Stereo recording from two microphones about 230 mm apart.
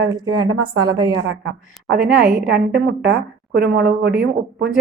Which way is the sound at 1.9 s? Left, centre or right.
Right.